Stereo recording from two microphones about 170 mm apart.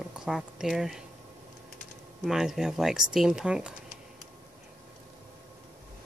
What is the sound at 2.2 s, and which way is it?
Speech, centre (ahead or behind).